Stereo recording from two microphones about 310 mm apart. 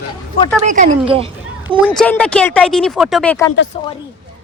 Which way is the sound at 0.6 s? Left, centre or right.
Right.